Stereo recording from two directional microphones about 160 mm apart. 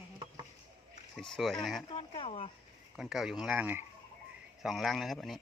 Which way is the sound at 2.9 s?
Centre (ahead or behind).